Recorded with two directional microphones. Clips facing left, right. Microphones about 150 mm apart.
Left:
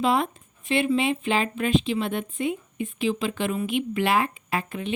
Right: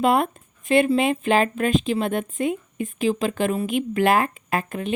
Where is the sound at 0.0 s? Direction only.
55° right (ahead or behind).